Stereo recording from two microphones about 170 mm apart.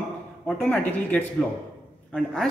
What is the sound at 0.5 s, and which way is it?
A man's voice, 10° left (ahead or behind).